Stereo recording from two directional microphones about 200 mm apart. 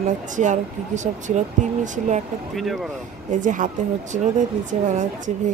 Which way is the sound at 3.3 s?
40° right (ahead or behind).